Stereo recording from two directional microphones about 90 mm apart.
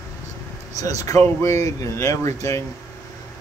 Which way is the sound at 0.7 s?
40° left (ahead or behind).